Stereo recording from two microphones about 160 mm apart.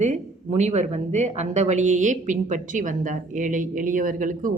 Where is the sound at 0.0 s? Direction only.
45° right (ahead or behind).